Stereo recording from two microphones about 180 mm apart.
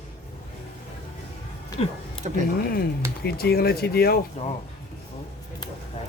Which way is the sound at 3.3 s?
60° left (ahead or behind).